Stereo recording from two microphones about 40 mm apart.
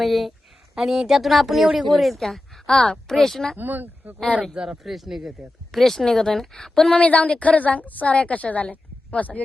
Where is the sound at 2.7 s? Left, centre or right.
Centre.